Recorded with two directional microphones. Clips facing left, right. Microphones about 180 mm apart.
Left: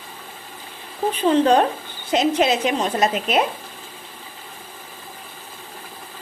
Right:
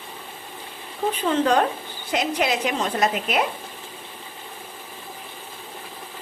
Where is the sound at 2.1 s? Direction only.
25° left (ahead or behind).